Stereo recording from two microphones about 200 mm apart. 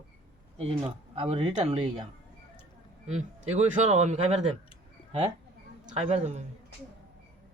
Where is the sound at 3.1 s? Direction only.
35° right (ahead or behind).